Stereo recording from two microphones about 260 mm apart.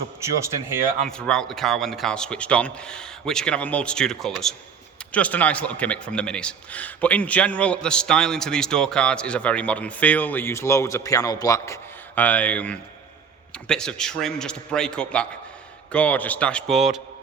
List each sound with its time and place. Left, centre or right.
0.2 s speech: centre
1.0 s speech: centre